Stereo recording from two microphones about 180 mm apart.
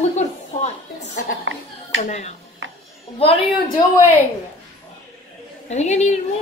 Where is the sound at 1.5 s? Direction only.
90° right.